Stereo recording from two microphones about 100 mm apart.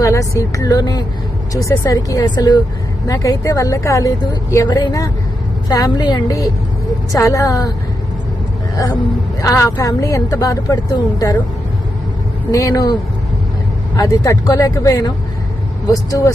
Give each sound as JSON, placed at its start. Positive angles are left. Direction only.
{"t": 0.0, "sound": "speech", "side_deg": 30}
{"t": 7.1, "sound": "speech", "side_deg": 30}
{"t": 9.4, "sound": "speech", "side_deg": 35}
{"t": 12.5, "sound": "speech", "side_deg": 35}